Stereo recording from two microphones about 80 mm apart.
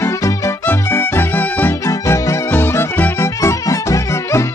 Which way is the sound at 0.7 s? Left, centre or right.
Left.